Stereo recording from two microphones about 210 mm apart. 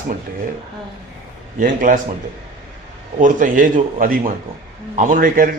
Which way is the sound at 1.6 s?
40° right (ahead or behind).